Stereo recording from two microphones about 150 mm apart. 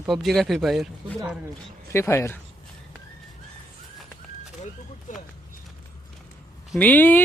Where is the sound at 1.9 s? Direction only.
15° left (ahead or behind).